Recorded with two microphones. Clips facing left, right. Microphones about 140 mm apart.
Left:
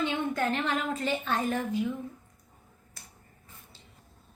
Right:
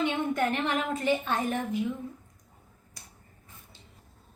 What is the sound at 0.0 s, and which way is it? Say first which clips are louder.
A woman's voice: right 2 dB; 20° right (ahead or behind).